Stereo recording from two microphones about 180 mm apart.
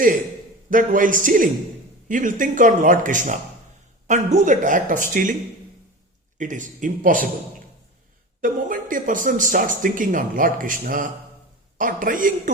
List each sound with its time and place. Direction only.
0.7 s speech: 50° right (ahead or behind)
6.4 s speech: 45° right (ahead or behind)
8.4 s speech: 50° right (ahead or behind)